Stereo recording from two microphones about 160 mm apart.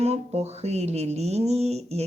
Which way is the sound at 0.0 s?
40° right (ahead or behind).